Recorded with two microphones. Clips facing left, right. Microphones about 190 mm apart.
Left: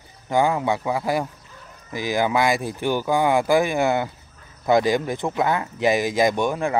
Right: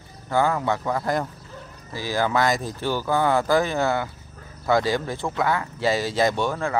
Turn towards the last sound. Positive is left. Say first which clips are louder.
# left 2 dB
turn(degrees=15)  # may be behind; listen again after turning